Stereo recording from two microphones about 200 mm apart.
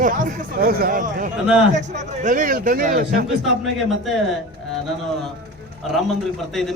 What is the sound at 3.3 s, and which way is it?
Speech, centre (ahead or behind).